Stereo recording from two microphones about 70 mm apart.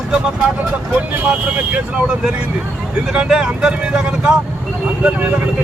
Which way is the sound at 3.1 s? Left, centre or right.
Centre.